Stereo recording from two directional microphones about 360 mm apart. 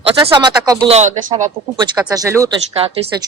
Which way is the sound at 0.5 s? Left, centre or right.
Centre.